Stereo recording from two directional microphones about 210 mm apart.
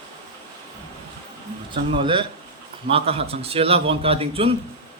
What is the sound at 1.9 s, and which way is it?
A man's voice, 25° right (ahead or behind).